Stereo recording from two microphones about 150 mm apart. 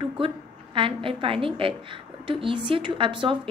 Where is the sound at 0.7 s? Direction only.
35° right (ahead or behind).